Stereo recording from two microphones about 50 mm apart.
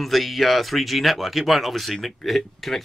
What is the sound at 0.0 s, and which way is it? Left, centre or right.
Speech, centre.